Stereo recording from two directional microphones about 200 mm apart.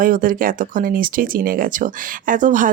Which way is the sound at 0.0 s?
45° right (ahead or behind).